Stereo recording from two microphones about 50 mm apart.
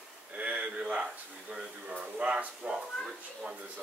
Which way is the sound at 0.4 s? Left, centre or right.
Right.